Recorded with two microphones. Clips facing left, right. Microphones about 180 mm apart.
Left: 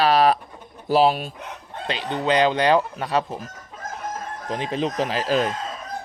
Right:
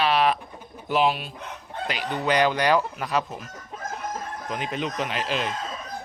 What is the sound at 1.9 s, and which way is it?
Chicken, 25° left (ahead or behind).